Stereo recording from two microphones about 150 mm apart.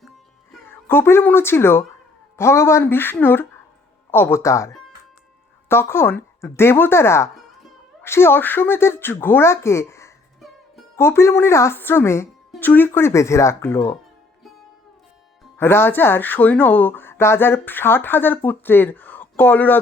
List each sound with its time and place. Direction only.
0.7 s speech: 15° left (ahead or behind)
15.5 s speech: 15° left (ahead or behind)